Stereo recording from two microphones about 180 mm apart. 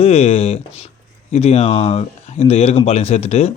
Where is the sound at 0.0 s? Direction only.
35° left (ahead or behind).